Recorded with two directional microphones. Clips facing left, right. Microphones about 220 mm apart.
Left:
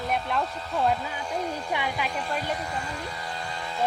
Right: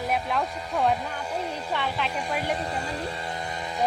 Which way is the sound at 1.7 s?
10° left (ahead or behind).